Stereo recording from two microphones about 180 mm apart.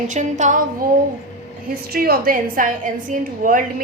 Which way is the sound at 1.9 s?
55° right (ahead or behind).